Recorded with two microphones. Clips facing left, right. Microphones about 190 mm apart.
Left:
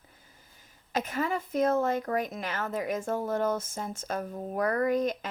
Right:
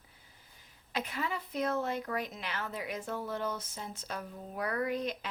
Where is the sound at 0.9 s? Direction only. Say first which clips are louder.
Left 6 dB; 45° left (ahead or behind).